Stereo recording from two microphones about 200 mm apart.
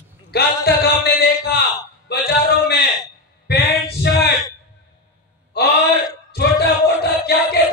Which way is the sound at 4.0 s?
55° left (ahead or behind).